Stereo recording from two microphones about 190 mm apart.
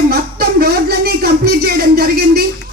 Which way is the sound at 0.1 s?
55° right (ahead or behind).